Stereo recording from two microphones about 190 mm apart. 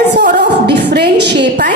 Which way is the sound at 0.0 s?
60° right (ahead or behind).